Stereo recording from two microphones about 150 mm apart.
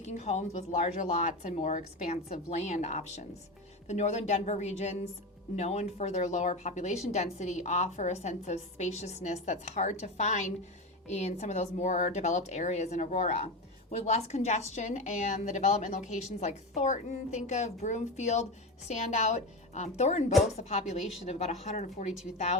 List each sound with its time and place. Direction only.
0.0 s speech: 50° left (ahead or behind)